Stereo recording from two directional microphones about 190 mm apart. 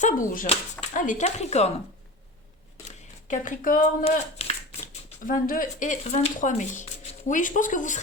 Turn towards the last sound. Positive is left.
turn(degrees=40)  # may be behind; listen again after turning